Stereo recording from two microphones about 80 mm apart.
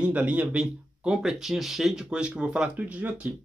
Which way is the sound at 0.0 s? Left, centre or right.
Centre.